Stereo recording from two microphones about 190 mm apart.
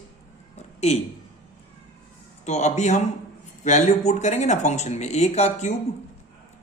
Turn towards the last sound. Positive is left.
turn(degrees=35)  # may be behind; listen again after turning